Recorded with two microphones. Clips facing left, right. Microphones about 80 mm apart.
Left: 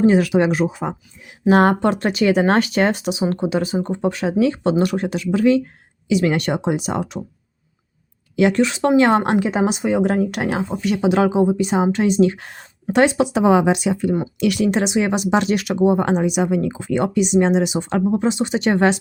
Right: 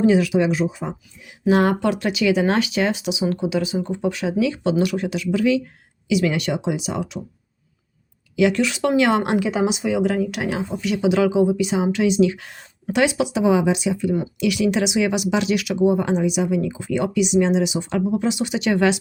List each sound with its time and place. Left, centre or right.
0.0 s speech: left
8.4 s speech: left
13.4 s speech: left